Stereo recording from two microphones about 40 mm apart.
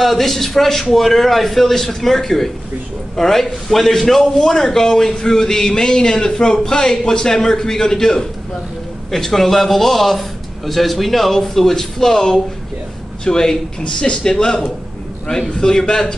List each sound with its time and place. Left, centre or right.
0.0 s a man's voice: centre